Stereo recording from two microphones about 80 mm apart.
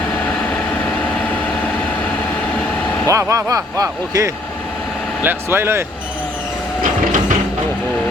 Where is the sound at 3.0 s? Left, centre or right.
Right.